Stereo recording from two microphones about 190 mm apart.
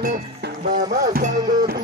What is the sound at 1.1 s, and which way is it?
Music, 50° right (ahead or behind).